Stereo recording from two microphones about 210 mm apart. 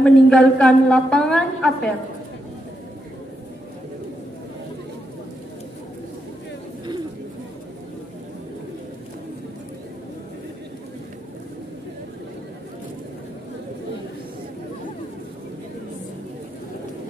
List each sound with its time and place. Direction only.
0.0 s a woman's voice: 5° left (ahead or behind)